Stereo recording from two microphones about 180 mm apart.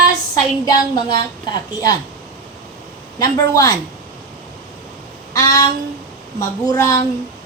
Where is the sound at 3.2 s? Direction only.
20° left (ahead or behind).